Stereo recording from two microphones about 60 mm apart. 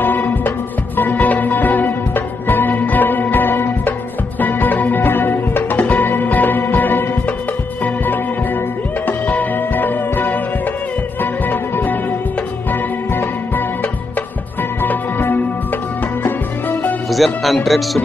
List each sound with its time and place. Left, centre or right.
0.0 s music: left
13.1 s music: left
14.8 s music: left
17.1 s speech: centre